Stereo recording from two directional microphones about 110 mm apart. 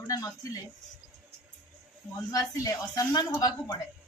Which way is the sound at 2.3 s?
30° left (ahead or behind).